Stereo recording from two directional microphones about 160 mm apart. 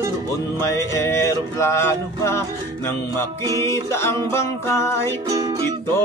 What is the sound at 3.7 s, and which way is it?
Music, 15° left (ahead or behind).